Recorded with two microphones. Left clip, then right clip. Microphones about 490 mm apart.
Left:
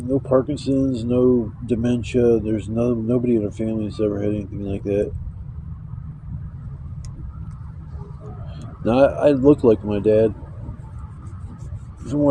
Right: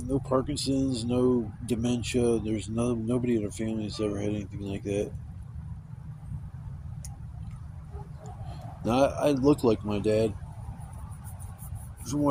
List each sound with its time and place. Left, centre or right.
0.1 s speech: right
8.8 s speech: right
12.0 s speech: right